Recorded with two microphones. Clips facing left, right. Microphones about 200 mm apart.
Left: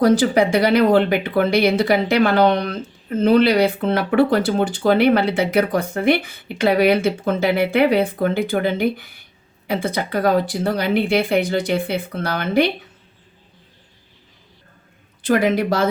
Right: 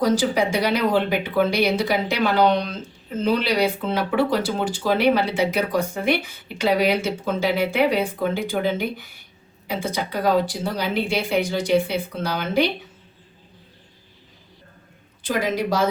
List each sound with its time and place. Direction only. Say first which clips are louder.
0.0 s speech: left 5 dB; 60° left (ahead or behind)
15.2 s speech: left 6 dB; 60° left (ahead or behind)